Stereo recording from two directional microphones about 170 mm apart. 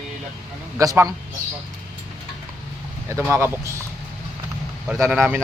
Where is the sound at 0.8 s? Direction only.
20° right (ahead or behind).